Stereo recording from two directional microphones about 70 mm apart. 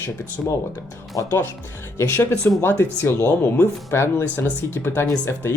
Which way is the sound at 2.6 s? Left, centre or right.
Left.